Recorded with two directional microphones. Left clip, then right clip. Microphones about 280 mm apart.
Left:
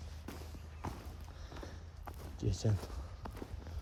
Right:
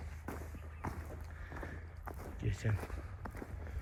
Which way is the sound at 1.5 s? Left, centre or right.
Centre.